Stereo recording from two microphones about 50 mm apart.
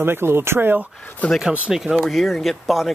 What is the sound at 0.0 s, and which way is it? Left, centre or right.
Speech, right.